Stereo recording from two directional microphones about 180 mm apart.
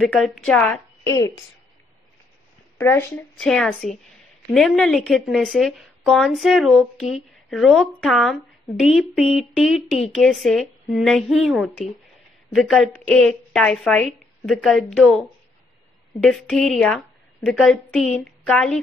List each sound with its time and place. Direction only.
0.1 s a woman's voice: centre (ahead or behind)
2.8 s speech: 15° left (ahead or behind)
3.3 s a woman's voice: 5° left (ahead or behind)